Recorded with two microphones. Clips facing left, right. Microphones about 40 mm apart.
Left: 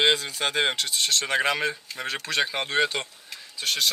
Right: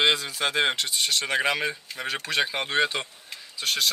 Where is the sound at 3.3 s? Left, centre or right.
Centre.